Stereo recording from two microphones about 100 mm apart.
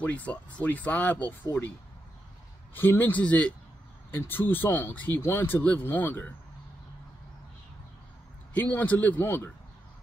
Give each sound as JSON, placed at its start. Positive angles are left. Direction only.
{"t": 0.0, "sound": "speech", "side_deg": 15}
{"t": 2.7, "sound": "speech", "side_deg": 20}
{"t": 8.5, "sound": "speech", "side_deg": 15}